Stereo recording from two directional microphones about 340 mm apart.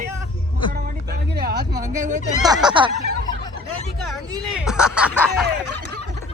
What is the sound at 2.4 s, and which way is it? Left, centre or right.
Speech, centre.